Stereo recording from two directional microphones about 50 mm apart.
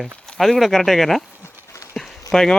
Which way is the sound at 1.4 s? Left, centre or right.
Left.